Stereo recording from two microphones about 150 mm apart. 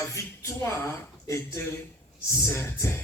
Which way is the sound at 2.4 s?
15° left (ahead or behind).